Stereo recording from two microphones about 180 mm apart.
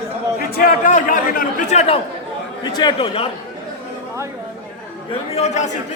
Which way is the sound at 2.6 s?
25° left (ahead or behind).